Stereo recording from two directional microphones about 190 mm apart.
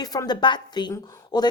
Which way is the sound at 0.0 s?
20° left (ahead or behind).